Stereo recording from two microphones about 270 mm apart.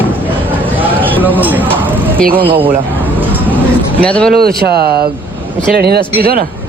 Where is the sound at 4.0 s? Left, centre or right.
Centre.